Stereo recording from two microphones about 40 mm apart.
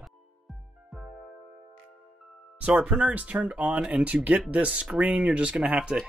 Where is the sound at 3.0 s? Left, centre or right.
Right.